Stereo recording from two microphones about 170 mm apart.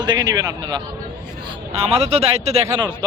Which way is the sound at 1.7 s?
40° right (ahead or behind).